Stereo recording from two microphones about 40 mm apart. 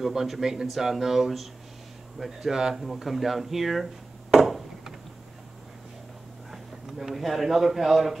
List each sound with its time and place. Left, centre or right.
0.0 s speech: centre
4.4 s a sound: centre
6.5 s speech: centre